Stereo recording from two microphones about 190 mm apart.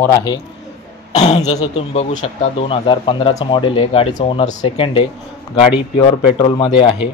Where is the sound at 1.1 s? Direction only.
35° left (ahead or behind).